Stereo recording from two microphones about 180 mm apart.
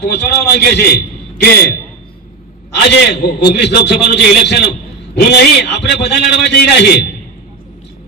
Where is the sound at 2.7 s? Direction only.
70° left (ahead or behind).